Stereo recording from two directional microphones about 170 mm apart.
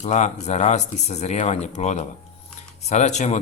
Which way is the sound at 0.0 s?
45° left (ahead or behind).